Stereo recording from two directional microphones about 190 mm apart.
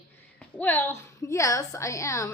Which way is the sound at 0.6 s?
10° left (ahead or behind).